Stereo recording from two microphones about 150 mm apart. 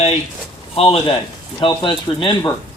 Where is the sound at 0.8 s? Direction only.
40° left (ahead or behind).